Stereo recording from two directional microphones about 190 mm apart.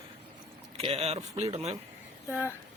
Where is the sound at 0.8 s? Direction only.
30° right (ahead or behind).